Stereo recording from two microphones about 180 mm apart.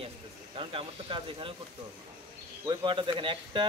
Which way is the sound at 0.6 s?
30° right (ahead or behind).